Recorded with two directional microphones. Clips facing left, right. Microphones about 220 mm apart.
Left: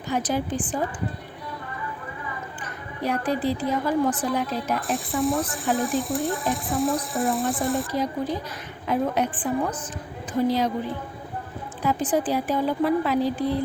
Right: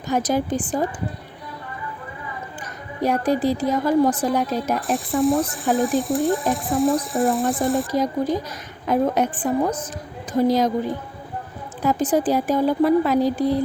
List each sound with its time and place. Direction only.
0.1 s a woman's voice: 40° right (ahead or behind)
3.0 s a woman's voice: 45° right (ahead or behind)
4.9 s speech: centre (ahead or behind)
7.9 s a woman's voice: 45° right (ahead or behind)
11.8 s a woman's voice: 40° right (ahead or behind)